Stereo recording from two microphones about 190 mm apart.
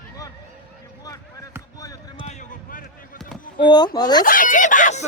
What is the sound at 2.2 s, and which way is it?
Basketball bounce, 40° left (ahead or behind).